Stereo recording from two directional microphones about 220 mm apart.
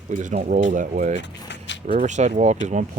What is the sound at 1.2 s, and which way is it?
Vehicle, 55° left (ahead or behind).